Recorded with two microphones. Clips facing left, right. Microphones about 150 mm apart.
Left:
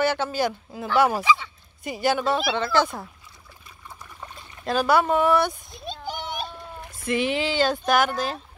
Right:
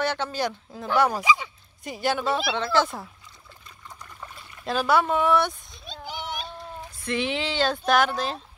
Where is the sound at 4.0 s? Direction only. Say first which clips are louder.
Left 1 dB; 20° left (ahead or behind).